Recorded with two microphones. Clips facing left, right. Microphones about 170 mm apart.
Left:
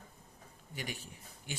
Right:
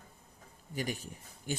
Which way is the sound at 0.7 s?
40° right (ahead or behind).